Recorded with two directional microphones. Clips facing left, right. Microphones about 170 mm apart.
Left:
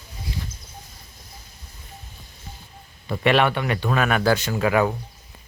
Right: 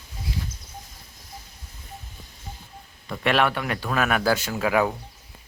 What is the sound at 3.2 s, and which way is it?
Speech, centre (ahead or behind).